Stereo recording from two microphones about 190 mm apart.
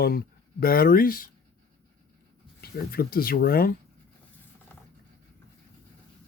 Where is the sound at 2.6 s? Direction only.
50° left (ahead or behind).